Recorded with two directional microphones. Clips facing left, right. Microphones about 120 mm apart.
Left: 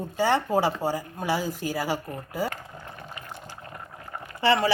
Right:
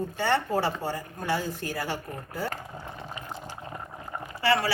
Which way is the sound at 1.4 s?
90° left.